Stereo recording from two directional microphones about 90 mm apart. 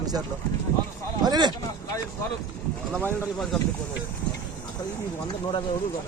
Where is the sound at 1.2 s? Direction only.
50° right (ahead or behind).